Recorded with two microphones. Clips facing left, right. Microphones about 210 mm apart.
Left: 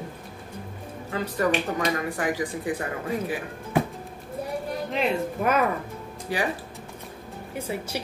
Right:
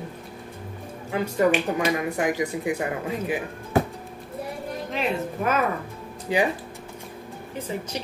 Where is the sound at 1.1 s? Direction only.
15° right (ahead or behind).